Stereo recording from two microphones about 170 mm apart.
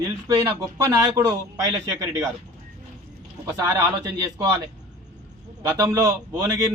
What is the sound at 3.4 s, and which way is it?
A man's voice, 20° right (ahead or behind).